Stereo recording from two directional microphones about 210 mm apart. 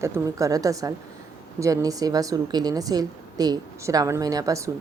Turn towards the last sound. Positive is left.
turn(degrees=-15)  # may be behind; listen again after turning